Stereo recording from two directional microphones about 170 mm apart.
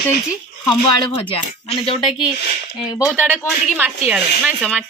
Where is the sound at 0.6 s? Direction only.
30° left (ahead or behind).